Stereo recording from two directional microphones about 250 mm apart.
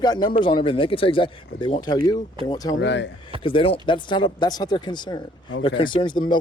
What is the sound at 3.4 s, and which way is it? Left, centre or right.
Speech, left.